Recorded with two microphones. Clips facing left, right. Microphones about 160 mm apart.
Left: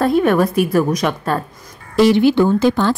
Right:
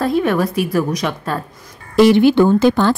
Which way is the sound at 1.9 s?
60° right (ahead or behind).